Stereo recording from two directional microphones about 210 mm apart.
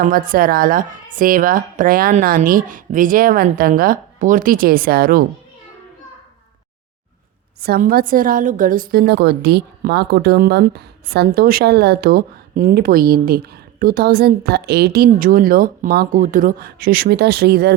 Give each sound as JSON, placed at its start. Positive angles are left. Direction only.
{"t": 0.0, "sound": "speech", "side_deg": -40}
{"t": 7.6, "sound": "a woman's voice", "side_deg": -45}